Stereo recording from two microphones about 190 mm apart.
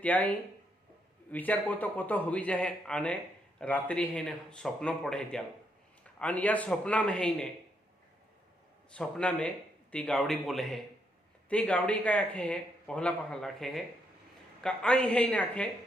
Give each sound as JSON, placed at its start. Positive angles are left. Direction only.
{"t": 0.0, "sound": "speech", "side_deg": 10}
{"t": 8.9, "sound": "speech", "side_deg": 5}